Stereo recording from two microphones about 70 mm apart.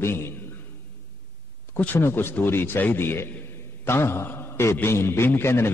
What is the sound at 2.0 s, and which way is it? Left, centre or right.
A man's voice, left.